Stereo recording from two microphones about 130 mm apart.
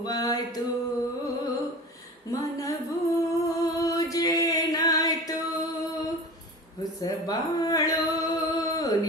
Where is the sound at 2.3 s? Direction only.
25° left (ahead or behind).